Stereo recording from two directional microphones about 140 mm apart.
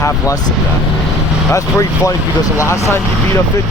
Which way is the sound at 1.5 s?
20° left (ahead or behind).